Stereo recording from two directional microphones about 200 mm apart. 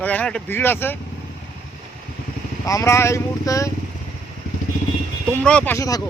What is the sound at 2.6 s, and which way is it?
Speech, 15° left (ahead or behind).